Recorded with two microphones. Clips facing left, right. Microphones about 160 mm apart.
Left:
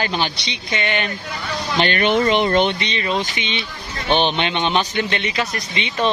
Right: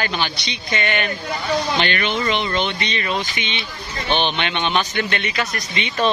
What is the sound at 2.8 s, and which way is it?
Speech, 25° left (ahead or behind).